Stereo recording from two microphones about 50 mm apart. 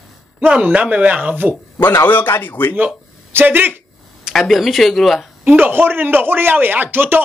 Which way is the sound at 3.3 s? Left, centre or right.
Right.